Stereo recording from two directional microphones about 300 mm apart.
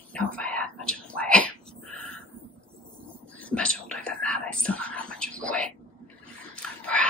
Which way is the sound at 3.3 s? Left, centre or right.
Centre.